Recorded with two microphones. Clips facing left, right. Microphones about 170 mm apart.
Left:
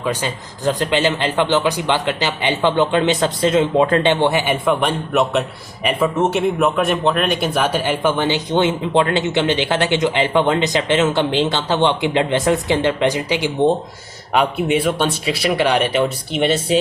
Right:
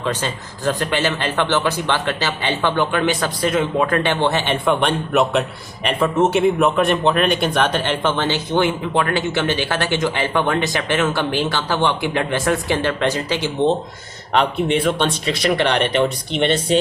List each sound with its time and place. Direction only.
0.0 s a man's voice: 10° left (ahead or behind)